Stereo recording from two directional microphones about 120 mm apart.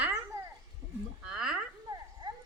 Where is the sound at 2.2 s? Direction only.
40° right (ahead or behind).